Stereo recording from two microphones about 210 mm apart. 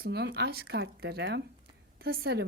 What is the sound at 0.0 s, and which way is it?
Speech, 50° right (ahead or behind).